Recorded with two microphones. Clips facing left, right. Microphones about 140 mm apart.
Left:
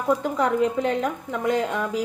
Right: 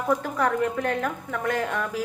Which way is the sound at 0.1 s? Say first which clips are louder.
Left 3 dB; 20° left (ahead or behind).